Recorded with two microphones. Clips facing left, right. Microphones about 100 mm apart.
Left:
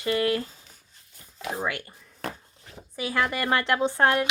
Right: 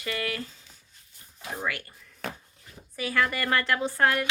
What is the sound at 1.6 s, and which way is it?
Speech, 25° left (ahead or behind).